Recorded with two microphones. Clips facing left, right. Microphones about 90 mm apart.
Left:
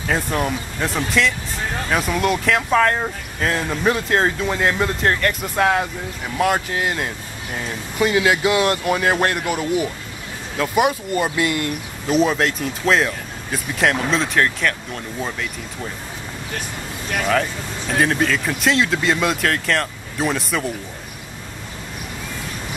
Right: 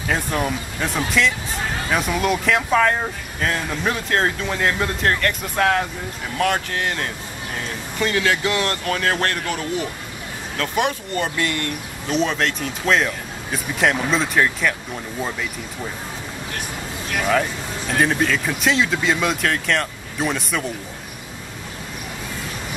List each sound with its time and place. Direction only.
0.1 s speech: centre (ahead or behind)
17.1 s speech: 5° right (ahead or behind)